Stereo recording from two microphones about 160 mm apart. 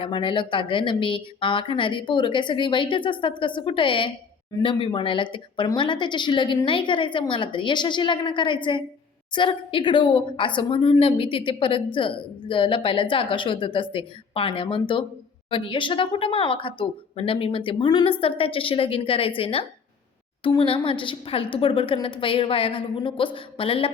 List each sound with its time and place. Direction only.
0.0 s speech: 35° left (ahead or behind)